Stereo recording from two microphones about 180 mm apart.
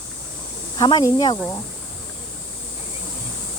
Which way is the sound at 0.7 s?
25° left (ahead or behind).